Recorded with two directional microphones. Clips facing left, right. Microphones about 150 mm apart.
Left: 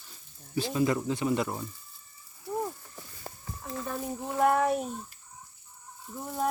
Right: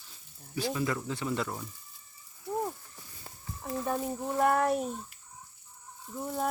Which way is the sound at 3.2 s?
45° left (ahead or behind).